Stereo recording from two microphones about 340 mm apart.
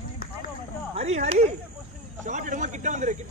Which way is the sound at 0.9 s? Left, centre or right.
Centre.